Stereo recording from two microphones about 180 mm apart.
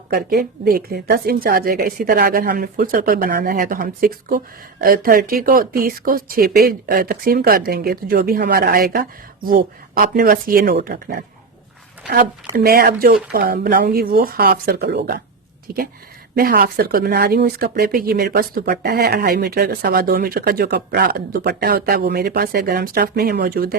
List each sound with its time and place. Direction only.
0.1 s a woman's voice: 60° right (ahead or behind)
12.5 s speech: 55° right (ahead or behind)